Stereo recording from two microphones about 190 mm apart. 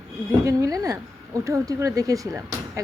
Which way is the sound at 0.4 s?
15° right (ahead or behind).